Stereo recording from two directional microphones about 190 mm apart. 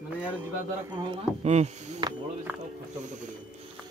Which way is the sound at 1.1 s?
35° right (ahead or behind).